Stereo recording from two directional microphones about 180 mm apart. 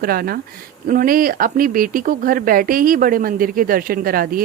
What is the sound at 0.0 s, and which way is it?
Speech, 55° right (ahead or behind).